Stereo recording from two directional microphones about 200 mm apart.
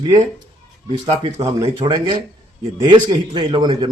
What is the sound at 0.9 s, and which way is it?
A man's voice, 30° right (ahead or behind).